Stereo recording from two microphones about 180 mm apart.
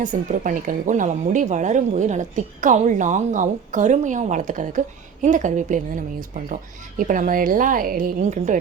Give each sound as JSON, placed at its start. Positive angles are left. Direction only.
{"t": 0.0, "sound": "a woman's voice", "side_deg": -45}